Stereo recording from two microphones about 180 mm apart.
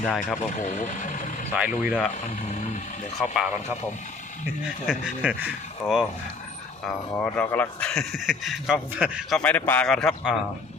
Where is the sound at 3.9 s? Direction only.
40° left (ahead or behind).